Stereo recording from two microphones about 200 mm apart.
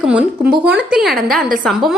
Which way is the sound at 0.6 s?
5° right (ahead or behind).